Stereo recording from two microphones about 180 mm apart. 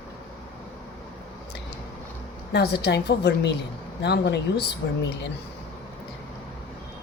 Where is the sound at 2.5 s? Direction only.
65° left (ahead or behind).